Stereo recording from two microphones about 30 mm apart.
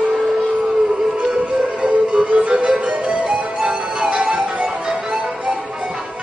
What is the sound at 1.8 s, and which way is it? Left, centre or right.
Music, right.